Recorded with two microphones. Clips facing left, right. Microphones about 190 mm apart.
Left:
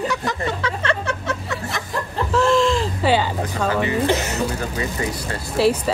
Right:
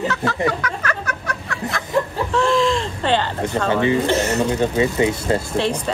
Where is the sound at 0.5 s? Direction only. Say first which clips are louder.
Even; 25° left (ahead or behind).